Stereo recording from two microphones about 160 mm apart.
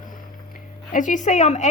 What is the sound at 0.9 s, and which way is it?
Speech, 55° left (ahead or behind).